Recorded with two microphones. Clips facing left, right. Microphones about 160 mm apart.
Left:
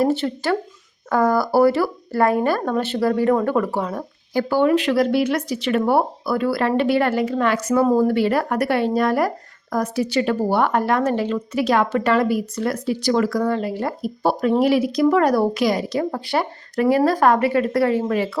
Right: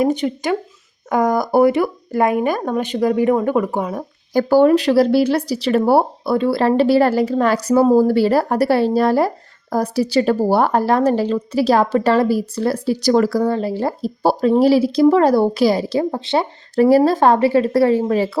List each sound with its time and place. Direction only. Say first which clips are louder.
0.0 s a woman's voice: right 2 dB; 15° right (ahead or behind)
4.4 s a woman's voice: right 5 dB; 40° right (ahead or behind)